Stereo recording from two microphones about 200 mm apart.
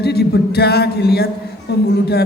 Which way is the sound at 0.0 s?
55° left (ahead or behind).